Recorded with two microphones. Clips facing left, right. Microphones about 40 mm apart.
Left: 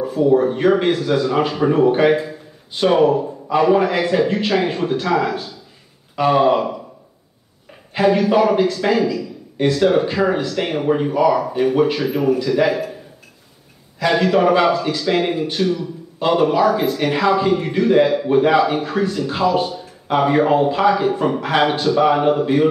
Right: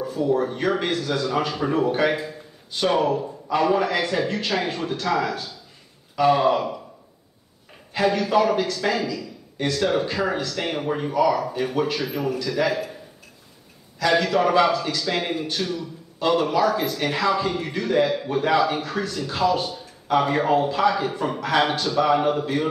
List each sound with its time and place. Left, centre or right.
0.0 s a man's voice: centre
7.9 s a man's voice: centre
13.9 s a man's voice: centre